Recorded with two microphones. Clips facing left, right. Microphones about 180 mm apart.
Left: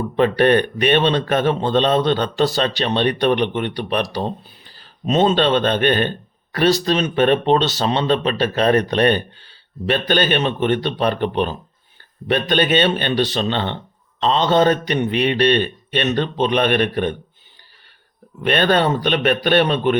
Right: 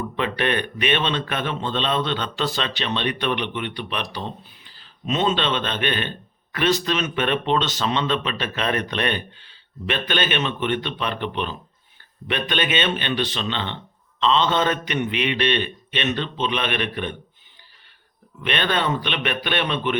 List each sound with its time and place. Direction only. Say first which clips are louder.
0.0 s speech: left 9 dB; 40° left (ahead or behind)
18.3 s speech: left 7 dB; 40° left (ahead or behind)